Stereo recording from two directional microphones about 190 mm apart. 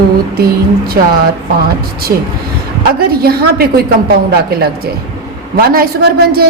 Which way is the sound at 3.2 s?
55° right (ahead or behind).